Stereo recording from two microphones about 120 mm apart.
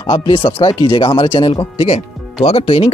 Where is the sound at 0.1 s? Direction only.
45° left (ahead or behind).